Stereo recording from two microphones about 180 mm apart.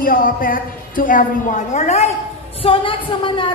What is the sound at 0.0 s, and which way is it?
A woman's voice, 50° left (ahead or behind).